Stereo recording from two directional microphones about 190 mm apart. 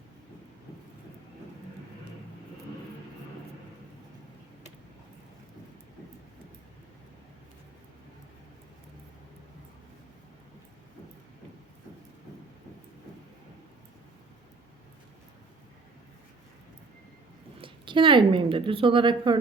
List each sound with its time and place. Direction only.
17.6 s a woman's voice: 25° right (ahead or behind)